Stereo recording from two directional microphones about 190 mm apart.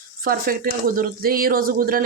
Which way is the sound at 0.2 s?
50° right (ahead or behind).